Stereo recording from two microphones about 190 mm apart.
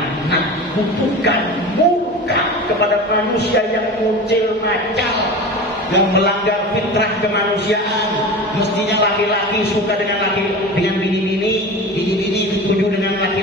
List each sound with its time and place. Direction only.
5.9 s a man's voice: 65° left (ahead or behind)